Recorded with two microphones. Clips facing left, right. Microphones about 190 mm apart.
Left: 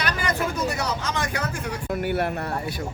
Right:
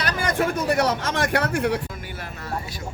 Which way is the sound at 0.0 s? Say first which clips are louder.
Right 3 dB; 50° right (ahead or behind).